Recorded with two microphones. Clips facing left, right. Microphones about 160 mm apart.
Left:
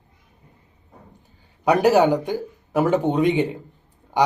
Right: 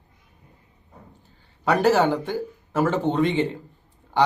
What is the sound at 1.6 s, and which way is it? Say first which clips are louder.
Speech: left 3 dB; 15° left (ahead or behind).